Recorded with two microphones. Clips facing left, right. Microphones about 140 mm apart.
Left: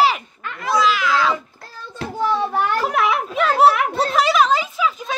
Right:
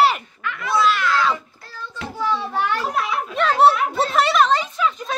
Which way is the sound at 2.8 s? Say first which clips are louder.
Left 4 dB; 70° left (ahead or behind).